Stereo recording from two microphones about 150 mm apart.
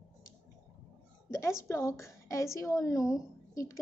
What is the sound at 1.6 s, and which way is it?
A woman's voice, 20° left (ahead or behind).